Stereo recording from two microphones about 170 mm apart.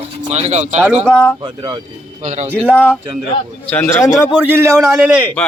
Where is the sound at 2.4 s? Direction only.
10° right (ahead or behind).